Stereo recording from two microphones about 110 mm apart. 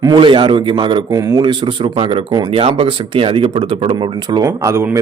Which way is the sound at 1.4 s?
50° right (ahead or behind).